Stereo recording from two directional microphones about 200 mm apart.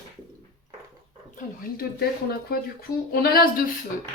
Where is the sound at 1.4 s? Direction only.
45° left (ahead or behind).